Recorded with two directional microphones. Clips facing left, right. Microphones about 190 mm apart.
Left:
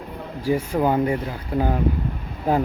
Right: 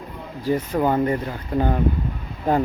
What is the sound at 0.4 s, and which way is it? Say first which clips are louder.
Speech: even; 10° left (ahead or behind).